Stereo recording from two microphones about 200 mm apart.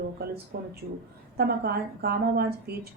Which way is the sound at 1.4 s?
55° right (ahead or behind).